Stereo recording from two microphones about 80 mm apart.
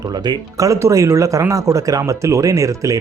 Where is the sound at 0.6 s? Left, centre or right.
Right.